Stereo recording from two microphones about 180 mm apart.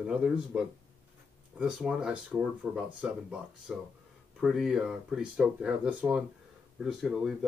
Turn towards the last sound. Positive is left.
turn(degrees=0)  # may be behind; listen again after turning